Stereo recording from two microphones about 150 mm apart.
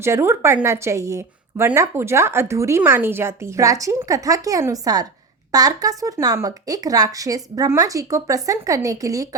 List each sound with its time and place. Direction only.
0.0 s a woman's voice: 15° right (ahead or behind)